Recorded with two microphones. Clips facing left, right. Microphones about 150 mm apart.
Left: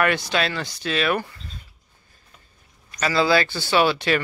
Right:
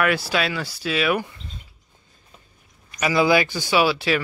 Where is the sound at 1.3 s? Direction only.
20° right (ahead or behind).